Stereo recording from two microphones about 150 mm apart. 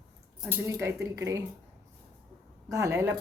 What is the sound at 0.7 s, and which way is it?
Speech, 20° right (ahead or behind).